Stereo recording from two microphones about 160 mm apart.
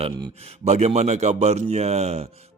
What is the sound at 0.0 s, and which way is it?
A man's voice, 40° right (ahead or behind).